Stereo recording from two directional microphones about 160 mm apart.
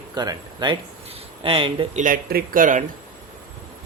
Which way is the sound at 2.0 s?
60° right (ahead or behind).